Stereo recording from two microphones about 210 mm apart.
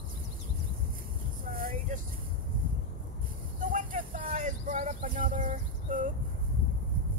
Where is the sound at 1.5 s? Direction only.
40° right (ahead or behind).